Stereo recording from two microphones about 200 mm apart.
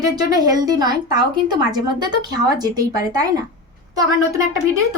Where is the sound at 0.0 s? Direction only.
20° right (ahead or behind).